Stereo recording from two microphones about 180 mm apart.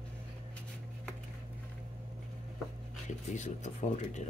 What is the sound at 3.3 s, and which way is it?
Speech, 40° left (ahead or behind).